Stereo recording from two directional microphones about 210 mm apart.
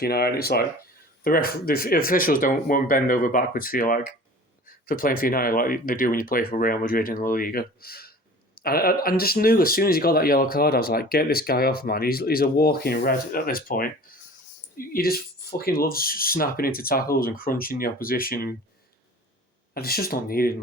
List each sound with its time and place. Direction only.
0.0 s speech: 45° left (ahead or behind)
19.7 s speech: 45° left (ahead or behind)